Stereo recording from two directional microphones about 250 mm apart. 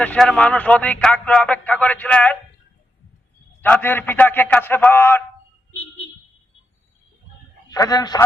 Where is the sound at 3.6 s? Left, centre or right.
Centre.